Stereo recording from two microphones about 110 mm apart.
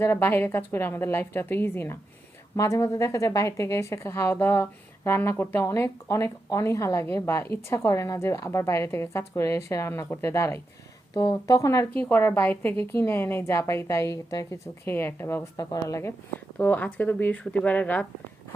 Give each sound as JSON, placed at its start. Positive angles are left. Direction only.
{"t": 0.0, "sound": "speech", "side_deg": 20}
{"t": 11.1, "sound": "speech", "side_deg": 35}
{"t": 11.9, "sound": "speech", "side_deg": 15}
{"t": 15.5, "sound": "speech", "side_deg": 35}
{"t": 16.6, "sound": "speech", "side_deg": 15}